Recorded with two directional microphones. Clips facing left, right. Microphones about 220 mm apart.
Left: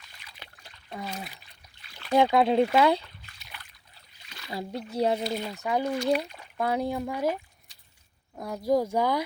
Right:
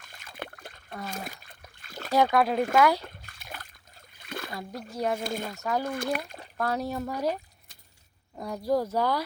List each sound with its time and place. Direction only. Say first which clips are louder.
0.0 s splash: right 11 dB; 50° right (ahead or behind)
0.9 s speech: left 1 dB; 10° left (ahead or behind)
1.1 s splash: right 1 dB; 45° right (ahead or behind)
2.1 s speech: left 2 dB; 25° left (ahead or behind)
3.0 s splash: right 7 dB; 50° right (ahead or behind)
4.9 s speech: left 4 dB; 30° left (ahead or behind)
5.2 s speech: left 1 dB; 50° right (ahead or behind)
6.6 s speech: left 2 dB; 15° left (ahead or behind)
8.4 s speech: even; centre (ahead or behind)
8.6 s speech: left 2 dB; 10° left (ahead or behind)